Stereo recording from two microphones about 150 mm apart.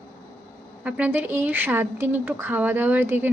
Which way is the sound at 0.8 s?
10° right (ahead or behind).